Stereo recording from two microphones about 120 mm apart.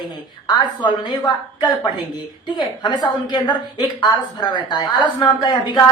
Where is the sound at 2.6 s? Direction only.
40° left (ahead or behind).